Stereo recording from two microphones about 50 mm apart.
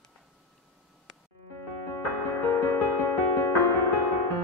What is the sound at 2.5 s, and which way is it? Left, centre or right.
Music, left.